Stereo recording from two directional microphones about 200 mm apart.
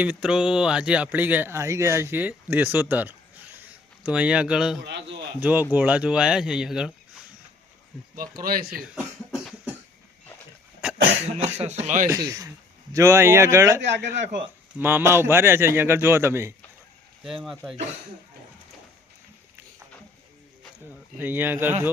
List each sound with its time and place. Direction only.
0.0 s speech: 5° right (ahead or behind)
8.4 s speech: 45° right (ahead or behind)
9.3 s cough: centre (ahead or behind)
11.3 s speech: 30° right (ahead or behind)
12.1 s speech: 15° right (ahead or behind)
17.2 s speech: centre (ahead or behind)
21.2 s speech: 10° right (ahead or behind)